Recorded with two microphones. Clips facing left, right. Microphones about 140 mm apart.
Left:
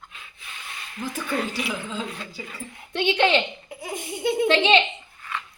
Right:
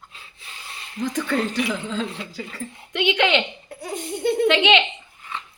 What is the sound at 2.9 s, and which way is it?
Speech, 30° left (ahead or behind).